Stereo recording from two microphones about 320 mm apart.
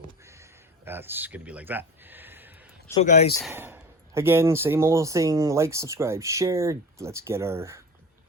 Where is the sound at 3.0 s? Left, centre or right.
Left.